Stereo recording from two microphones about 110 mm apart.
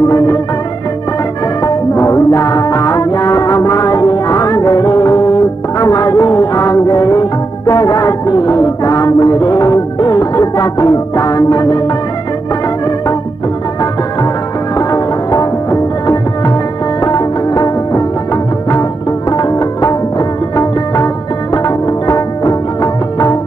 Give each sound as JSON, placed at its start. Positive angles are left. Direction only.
{"t": 1.6, "sound": "music", "side_deg": 30}
{"t": 14.8, "sound": "music", "side_deg": 35}